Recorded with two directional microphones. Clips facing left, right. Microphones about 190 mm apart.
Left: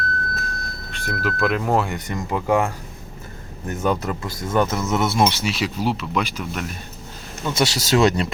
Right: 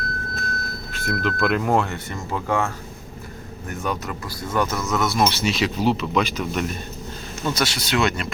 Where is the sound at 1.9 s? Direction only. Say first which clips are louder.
Left 3 dB; 15° left (ahead or behind).